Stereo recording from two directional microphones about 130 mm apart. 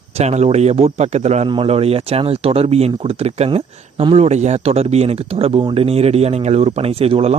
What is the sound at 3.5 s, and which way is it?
Speech, 40° right (ahead or behind).